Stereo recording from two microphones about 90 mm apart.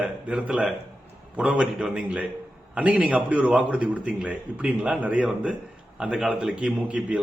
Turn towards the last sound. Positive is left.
turn(degrees=-15)  # may be behind; listen again after turning